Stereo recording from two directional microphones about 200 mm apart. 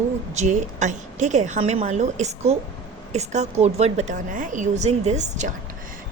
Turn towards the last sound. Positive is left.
turn(degrees=-35)  # may be behind; listen again after turning